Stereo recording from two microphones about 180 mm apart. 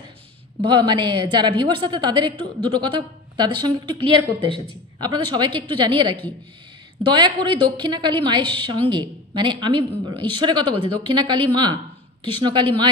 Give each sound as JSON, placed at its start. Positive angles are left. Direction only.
{"t": 0.6, "sound": "a woman's voice", "side_deg": -25}